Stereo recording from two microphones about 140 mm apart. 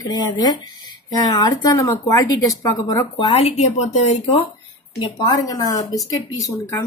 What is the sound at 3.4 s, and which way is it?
Speech, 50° left (ahead or behind).